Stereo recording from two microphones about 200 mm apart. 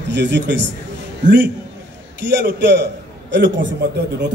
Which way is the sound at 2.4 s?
60° right (ahead or behind).